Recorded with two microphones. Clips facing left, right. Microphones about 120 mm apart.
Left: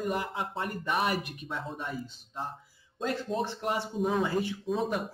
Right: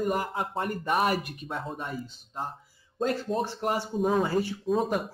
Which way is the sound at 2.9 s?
45° right (ahead or behind).